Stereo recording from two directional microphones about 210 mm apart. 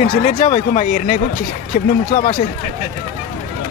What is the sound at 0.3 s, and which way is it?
Speech, 35° left (ahead or behind).